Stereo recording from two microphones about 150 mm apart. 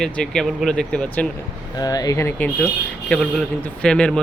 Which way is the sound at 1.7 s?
25° left (ahead or behind).